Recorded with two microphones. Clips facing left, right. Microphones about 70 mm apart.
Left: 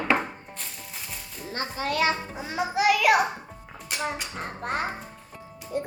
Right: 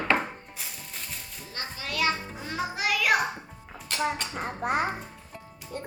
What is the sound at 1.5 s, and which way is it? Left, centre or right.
Music, left.